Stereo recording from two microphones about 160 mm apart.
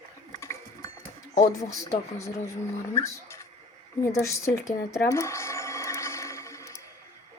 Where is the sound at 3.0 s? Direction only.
20° left (ahead or behind).